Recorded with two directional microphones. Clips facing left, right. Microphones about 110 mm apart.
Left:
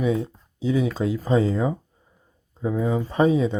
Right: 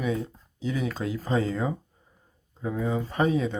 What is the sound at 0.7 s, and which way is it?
Speech, 20° left (ahead or behind).